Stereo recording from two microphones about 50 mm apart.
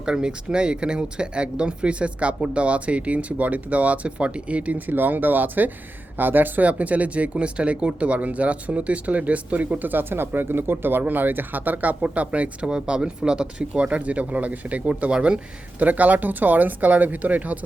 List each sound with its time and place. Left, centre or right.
0.0 s speech: centre
12.6 s speech: centre
15.8 s speech: right